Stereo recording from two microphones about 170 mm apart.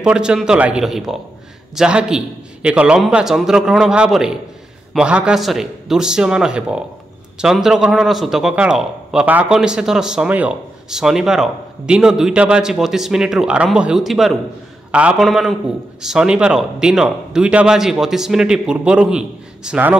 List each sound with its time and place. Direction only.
0.0 s a man's voice: 5° right (ahead or behind)